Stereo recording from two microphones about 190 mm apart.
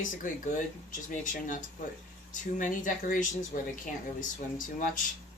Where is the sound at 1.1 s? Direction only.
40° left (ahead or behind).